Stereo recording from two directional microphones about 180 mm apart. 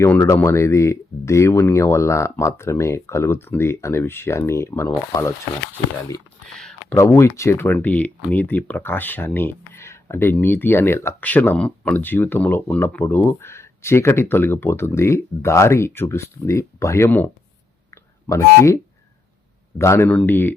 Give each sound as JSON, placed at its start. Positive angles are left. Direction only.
{"t": 0.0, "sound": "speech", "side_deg": 15}
{"t": 6.9, "sound": "speech", "side_deg": 15}
{"t": 17.9, "sound": "a sound", "side_deg": 15}
{"t": 19.8, "sound": "speech", "side_deg": 15}